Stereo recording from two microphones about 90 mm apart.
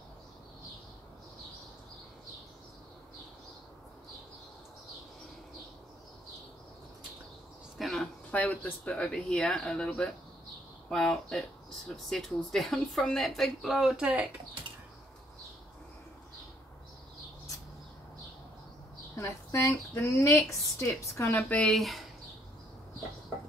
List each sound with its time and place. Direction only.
7.9 s speech: 15° left (ahead or behind); by 14.2 s 10° right (ahead or behind)
19.1 s a woman's voice: 30° left (ahead or behind)
21.5 s speech: 15° left (ahead or behind)
21.7 s speech: centre (ahead or behind)